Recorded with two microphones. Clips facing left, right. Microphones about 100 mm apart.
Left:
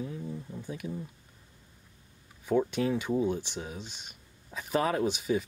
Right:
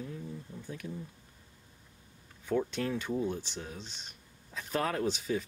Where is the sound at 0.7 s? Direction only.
10° left (ahead or behind).